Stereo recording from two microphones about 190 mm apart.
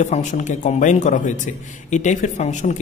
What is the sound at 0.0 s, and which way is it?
A man's voice, 40° left (ahead or behind).